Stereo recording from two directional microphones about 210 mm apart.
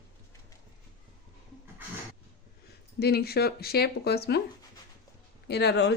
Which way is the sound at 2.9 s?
50° left (ahead or behind).